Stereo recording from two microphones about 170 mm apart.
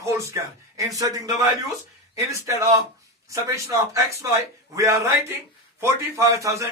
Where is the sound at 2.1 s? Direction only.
20° right (ahead or behind).